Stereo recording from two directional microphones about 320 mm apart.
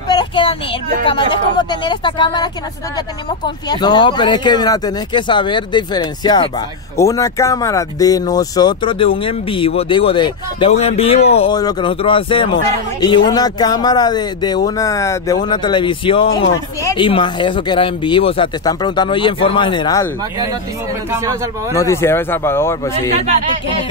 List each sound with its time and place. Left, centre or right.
0.1 s a sound: centre
1.0 s speech: centre
21.7 s speech: centre